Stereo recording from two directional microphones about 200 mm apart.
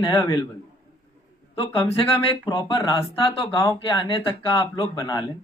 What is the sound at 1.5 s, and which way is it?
A man's voice, 25° left (ahead or behind).